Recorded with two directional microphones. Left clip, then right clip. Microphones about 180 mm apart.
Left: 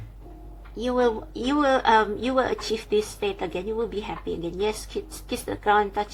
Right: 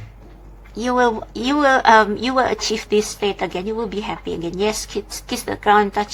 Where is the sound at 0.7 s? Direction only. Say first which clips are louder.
Right 6 dB; 20° right (ahead or behind).